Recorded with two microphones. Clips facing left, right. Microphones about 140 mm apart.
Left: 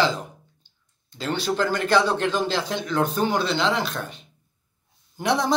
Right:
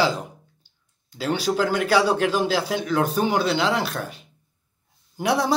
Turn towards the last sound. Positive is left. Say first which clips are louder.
# right 1 dB
turn(degrees=-5)  # may be behind; listen again after turning